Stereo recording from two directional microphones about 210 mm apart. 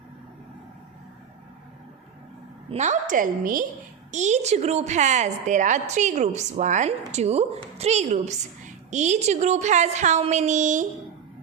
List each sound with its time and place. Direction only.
2.6 s a woman's voice: 35° right (ahead or behind)